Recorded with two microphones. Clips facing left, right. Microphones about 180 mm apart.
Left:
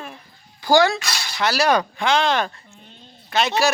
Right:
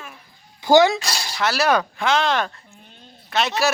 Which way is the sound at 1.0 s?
35° right (ahead or behind).